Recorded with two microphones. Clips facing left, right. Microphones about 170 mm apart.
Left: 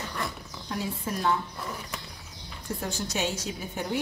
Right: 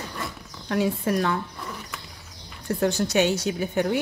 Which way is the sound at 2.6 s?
70° right (ahead or behind).